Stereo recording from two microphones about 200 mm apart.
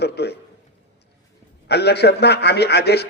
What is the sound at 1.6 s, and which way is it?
A man's voice, 55° left (ahead or behind).